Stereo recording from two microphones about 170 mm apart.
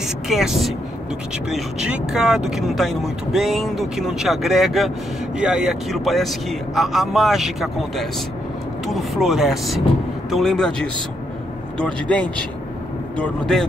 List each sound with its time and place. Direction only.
0.3 s speech: centre (ahead or behind)